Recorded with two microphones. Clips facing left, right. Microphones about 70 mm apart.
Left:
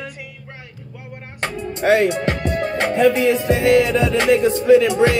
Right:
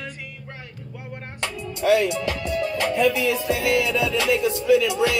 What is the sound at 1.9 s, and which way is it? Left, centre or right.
Music, left.